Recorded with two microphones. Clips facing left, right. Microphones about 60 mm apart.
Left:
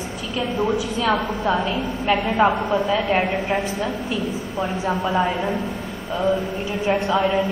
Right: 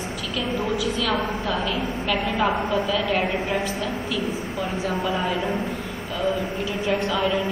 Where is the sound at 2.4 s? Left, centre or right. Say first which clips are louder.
Left 5 dB; left.